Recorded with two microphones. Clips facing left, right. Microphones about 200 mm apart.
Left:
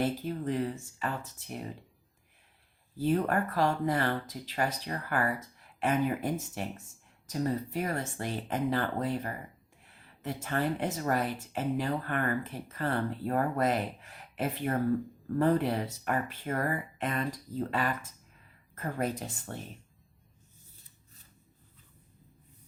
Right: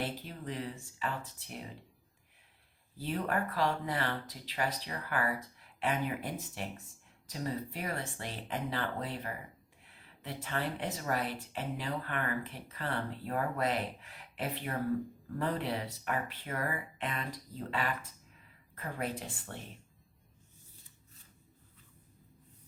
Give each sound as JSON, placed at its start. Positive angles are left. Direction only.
{"t": 0.0, "sound": "speech", "side_deg": 45}
{"t": 3.0, "sound": "speech", "side_deg": 45}